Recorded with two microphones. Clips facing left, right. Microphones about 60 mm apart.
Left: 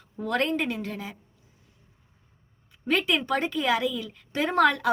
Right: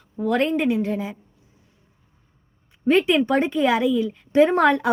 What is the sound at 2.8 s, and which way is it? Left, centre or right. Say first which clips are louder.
A woman's voice: right 8 dB; right.